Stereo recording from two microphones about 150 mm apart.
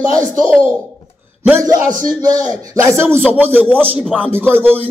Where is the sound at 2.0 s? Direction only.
25° right (ahead or behind).